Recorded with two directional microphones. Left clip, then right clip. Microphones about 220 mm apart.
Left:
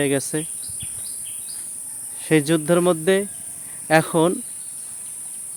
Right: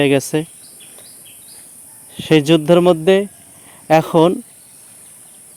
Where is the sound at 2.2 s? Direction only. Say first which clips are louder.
Right 6 dB; 30° right (ahead or behind).